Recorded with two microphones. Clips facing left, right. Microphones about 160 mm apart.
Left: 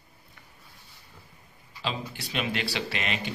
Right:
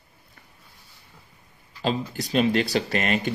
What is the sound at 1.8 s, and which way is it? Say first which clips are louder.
Speech: right 7 dB; 40° right (ahead or behind).